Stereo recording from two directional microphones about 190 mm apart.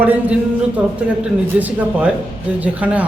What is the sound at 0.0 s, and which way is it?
Speech, 10° right (ahead or behind).